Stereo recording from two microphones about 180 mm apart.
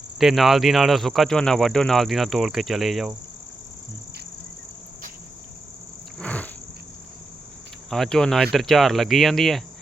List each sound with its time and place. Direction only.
0.2 s speech: centre (ahead or behind)
6.1 s cricket: 10° left (ahead or behind)
7.9 s speech: centre (ahead or behind)